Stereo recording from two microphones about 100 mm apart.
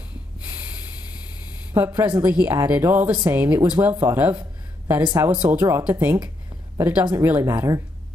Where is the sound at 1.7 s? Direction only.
30° right (ahead or behind).